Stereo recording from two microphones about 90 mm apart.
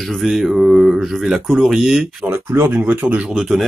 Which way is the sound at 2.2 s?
20° right (ahead or behind).